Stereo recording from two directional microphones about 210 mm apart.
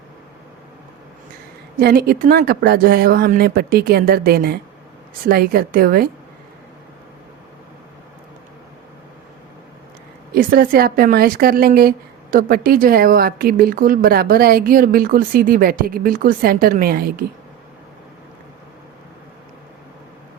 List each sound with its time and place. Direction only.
1.8 s speech: 45° right (ahead or behind)
10.3 s speech: 45° right (ahead or behind)